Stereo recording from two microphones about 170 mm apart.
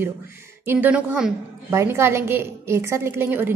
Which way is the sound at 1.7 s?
15° right (ahead or behind).